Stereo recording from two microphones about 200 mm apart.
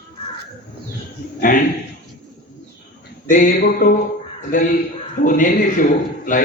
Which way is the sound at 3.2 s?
40° left (ahead or behind).